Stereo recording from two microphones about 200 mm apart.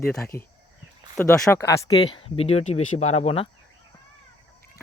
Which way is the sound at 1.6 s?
15° left (ahead or behind).